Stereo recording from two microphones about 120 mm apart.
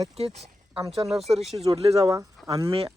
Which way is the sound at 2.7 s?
50° right (ahead or behind).